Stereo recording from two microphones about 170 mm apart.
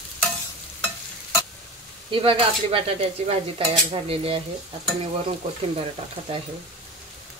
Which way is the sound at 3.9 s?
35° right (ahead or behind).